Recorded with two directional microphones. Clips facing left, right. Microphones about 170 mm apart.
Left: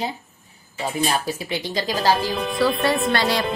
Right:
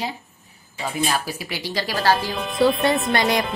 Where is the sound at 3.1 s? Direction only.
20° right (ahead or behind).